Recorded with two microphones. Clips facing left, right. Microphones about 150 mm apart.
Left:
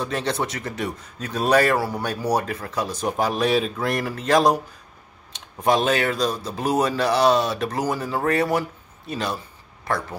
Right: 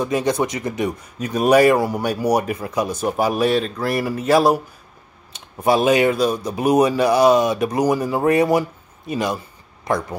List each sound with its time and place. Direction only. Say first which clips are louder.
0.0 s a man's voice: right 6 dB; 10° right (ahead or behind)